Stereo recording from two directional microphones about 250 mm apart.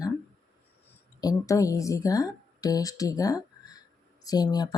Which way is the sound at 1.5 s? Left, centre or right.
Centre.